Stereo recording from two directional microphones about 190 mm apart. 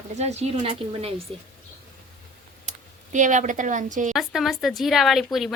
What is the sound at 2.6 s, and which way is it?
Speech, 40° right (ahead or behind).